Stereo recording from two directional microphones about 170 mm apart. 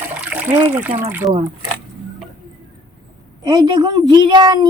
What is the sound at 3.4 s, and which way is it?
A woman's voice, 25° right (ahead or behind).